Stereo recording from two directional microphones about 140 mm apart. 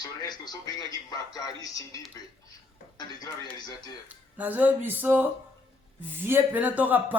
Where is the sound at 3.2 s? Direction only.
30° left (ahead or behind).